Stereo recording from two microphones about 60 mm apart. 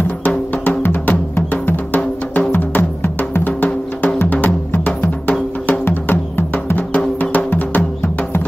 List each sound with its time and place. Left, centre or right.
0.8 s music: left